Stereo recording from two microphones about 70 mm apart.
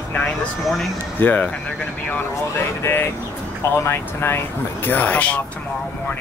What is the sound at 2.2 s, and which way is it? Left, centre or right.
Speech, left.